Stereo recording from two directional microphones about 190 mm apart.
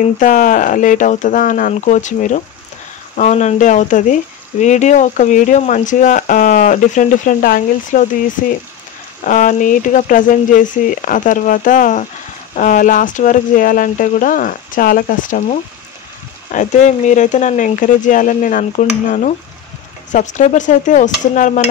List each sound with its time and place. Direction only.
0.2 s speech: 45° left (ahead or behind)